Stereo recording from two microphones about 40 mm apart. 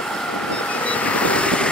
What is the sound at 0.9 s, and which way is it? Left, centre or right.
Vehicle, left.